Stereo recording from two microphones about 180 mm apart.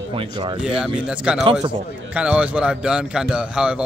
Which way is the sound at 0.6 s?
5° right (ahead or behind).